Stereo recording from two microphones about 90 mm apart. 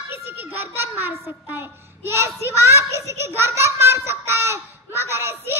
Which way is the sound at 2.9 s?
30° right (ahead or behind).